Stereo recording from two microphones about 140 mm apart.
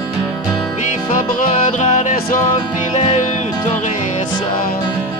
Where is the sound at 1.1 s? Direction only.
65° left (ahead or behind); by 3.2 s 50° left (ahead or behind).